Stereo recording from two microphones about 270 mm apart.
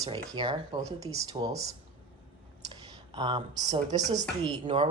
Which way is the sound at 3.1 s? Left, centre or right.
Centre.